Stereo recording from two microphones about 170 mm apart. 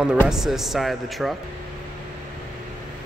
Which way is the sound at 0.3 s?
Centre (ahead or behind).